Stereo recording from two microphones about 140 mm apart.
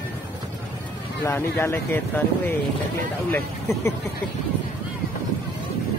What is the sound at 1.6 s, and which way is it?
Speech, 15° left (ahead or behind).